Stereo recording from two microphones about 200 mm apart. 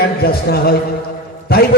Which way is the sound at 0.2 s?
50° left (ahead or behind).